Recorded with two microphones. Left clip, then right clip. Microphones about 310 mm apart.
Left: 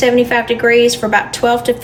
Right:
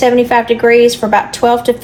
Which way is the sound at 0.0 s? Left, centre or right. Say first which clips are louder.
Right 2 dB; centre.